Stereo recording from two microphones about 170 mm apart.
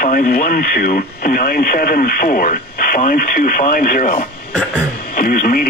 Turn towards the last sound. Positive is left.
turn(degrees=60)  # may be behind; listen again after turning